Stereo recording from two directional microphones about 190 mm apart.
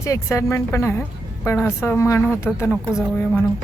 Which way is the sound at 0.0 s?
15° left (ahead or behind).